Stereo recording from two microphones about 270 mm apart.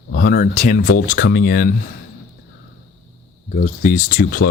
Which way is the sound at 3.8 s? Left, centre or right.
Left.